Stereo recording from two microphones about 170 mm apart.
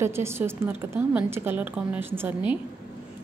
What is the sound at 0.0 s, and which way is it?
A woman's voice, 15° right (ahead or behind).